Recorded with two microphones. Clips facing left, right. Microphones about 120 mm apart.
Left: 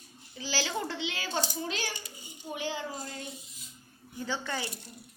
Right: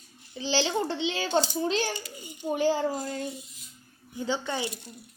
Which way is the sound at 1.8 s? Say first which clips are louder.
Right 6 dB; 60° right (ahead or behind).